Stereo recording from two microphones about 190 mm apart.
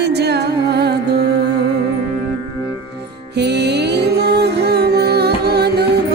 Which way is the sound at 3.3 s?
60° right (ahead or behind).